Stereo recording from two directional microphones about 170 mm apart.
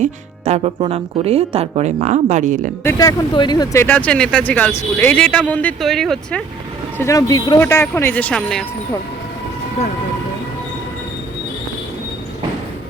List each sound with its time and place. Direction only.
0.0 s speech: 40° right (ahead or behind)
2.8 s speech: 20° left (ahead or behind); by 6.4 s centre (ahead or behind)
7.0 s speech: 20° left (ahead or behind); by 8.6 s 5° left (ahead or behind)